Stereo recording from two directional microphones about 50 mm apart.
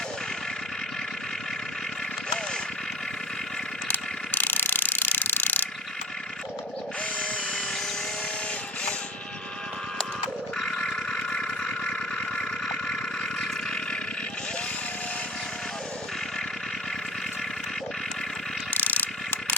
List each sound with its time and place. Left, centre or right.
3.9 s ratchet: left
10.6 s vehicle: centre
18.7 s mechanisms: left